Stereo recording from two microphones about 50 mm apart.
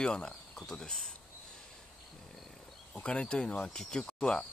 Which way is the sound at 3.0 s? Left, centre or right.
Left.